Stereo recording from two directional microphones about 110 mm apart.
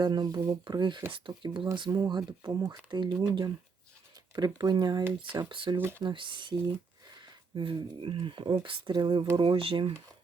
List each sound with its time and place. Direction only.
0.0 s speech: 40° right (ahead or behind)
5.7 s speech: 20° right (ahead or behind)
6.0 s speech: 45° right (ahead or behind)